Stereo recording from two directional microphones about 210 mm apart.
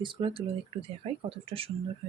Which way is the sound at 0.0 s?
25° right (ahead or behind).